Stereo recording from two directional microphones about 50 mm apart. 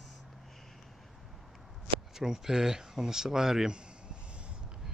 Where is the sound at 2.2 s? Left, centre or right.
Centre.